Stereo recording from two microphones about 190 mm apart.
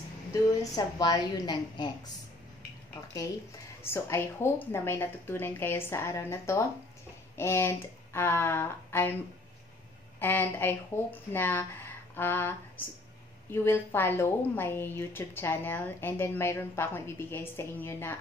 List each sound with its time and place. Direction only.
0.3 s a woman's voice: 20° left (ahead or behind)
2.9 s a woman's voice: 20° left (ahead or behind)
10.1 s a woman's voice: 10° left (ahead or behind)